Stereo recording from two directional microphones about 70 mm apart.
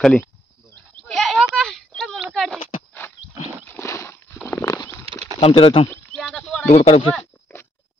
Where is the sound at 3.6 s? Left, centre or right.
Left.